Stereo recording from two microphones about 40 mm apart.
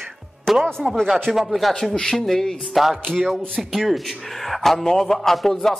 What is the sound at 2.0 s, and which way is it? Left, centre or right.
Speech, centre.